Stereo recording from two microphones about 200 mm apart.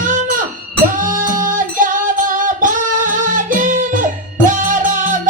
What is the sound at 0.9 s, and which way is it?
Music, 40° right (ahead or behind).